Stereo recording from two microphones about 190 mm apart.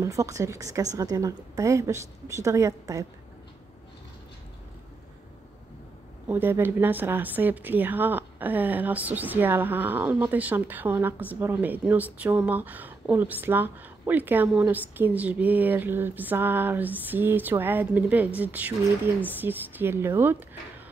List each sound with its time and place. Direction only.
0.0 s speech: 15° right (ahead or behind)
6.2 s speech: 10° right (ahead or behind)